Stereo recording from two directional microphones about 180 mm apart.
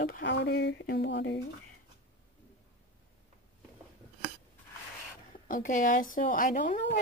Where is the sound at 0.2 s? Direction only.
75° left (ahead or behind).